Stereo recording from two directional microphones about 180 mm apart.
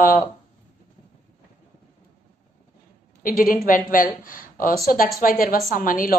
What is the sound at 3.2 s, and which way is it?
A woman's voice, 50° left (ahead or behind).